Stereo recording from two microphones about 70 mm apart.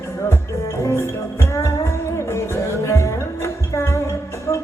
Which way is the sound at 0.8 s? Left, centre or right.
Left.